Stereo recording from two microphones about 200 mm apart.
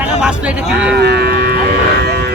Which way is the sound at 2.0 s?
55° right (ahead or behind).